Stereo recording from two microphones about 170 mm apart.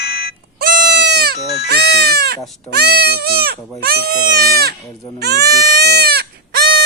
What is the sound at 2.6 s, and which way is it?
Speech, 70° right (ahead or behind).